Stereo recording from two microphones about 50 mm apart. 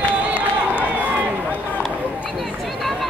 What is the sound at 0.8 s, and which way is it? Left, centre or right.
Run, right.